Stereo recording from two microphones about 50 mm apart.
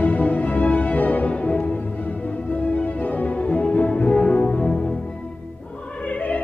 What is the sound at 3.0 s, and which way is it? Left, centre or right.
Music, left.